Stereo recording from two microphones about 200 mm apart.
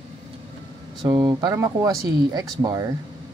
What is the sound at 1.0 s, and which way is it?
Speech, 20° right (ahead or behind).